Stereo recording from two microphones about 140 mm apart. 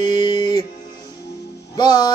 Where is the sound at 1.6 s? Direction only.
25° left (ahead or behind).